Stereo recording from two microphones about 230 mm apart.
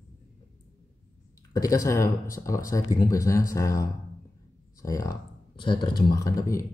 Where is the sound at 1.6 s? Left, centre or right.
Centre.